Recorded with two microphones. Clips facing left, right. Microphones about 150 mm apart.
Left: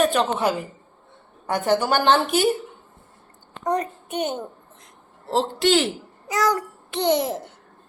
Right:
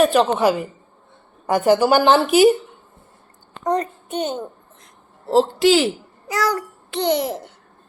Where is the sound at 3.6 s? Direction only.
10° left (ahead or behind).